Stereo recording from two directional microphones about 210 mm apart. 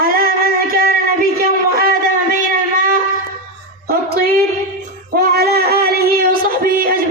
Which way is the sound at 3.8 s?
45° right (ahead or behind).